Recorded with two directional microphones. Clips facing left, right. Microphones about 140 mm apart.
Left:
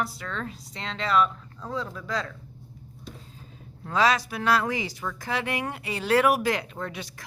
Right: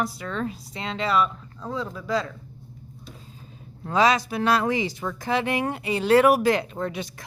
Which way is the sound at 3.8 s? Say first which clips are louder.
Right 3 dB; 20° right (ahead or behind).